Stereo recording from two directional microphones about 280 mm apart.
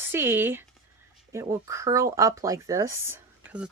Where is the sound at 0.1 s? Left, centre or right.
Centre.